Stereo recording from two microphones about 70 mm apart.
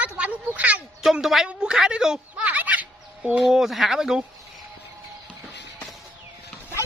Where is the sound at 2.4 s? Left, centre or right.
Right.